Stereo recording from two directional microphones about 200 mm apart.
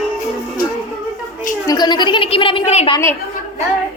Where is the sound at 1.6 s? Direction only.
20° left (ahead or behind).